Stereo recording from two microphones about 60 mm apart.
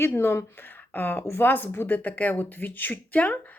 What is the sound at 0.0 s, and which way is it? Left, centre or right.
Speech, left.